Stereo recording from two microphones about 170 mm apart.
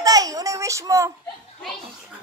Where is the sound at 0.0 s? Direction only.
20° right (ahead or behind).